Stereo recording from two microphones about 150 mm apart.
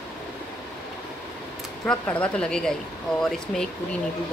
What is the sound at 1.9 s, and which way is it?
Speech, 5° left (ahead or behind).